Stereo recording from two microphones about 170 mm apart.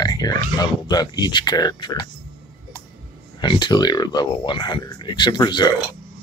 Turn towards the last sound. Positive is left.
turn(degrees=25)  # may be behind; listen again after turning